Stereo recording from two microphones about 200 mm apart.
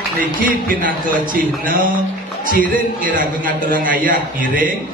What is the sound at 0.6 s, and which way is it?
A man's voice, 45° right (ahead or behind).